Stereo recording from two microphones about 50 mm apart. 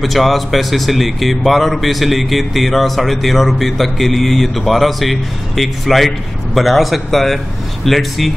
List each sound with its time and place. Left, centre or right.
0.0 s speech: centre